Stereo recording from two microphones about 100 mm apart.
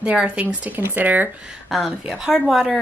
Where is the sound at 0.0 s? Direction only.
10° right (ahead or behind).